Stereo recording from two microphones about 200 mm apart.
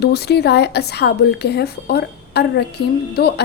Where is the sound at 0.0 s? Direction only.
55° left (ahead or behind).